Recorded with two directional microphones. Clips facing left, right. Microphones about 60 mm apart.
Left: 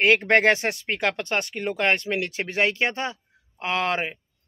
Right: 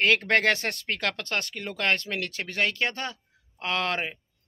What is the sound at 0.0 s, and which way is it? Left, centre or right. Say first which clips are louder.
Speech: left 4 dB; centre.